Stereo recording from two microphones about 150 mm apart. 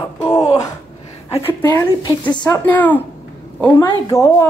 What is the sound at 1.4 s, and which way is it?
Speech, 20° left (ahead or behind).